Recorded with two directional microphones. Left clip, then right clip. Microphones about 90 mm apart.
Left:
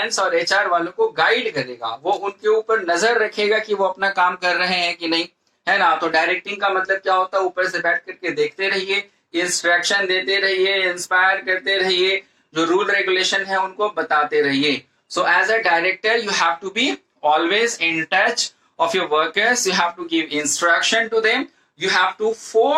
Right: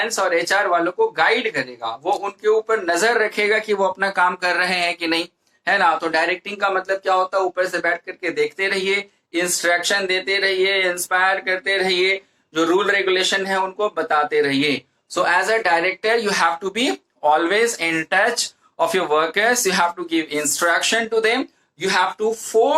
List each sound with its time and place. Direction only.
0.3 s speech: 40° right (ahead or behind)